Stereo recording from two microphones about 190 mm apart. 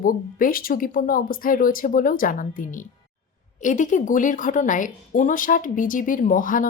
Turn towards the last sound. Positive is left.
turn(degrees=45)  # may be behind; listen again after turning